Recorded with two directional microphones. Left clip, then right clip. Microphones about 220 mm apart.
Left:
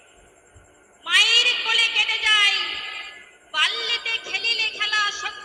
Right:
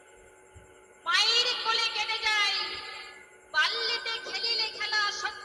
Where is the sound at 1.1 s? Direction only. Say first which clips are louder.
Left 9 dB; 15° left (ahead or behind).